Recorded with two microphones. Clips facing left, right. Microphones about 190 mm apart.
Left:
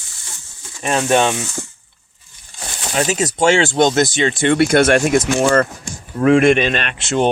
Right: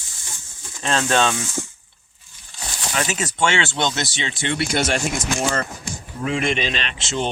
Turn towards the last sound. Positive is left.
turn(degrees=55)  # may be behind; listen again after turning